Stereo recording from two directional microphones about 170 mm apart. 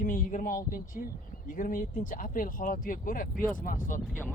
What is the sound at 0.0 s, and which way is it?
Speech, 50° left (ahead or behind).